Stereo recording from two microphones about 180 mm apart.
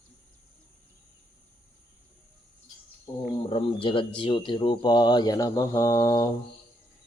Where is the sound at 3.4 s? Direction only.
30° left (ahead or behind).